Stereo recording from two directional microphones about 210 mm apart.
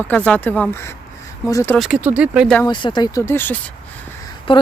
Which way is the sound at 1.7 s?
5° right (ahead or behind).